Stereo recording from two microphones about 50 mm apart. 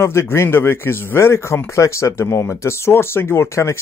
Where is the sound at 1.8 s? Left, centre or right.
Left.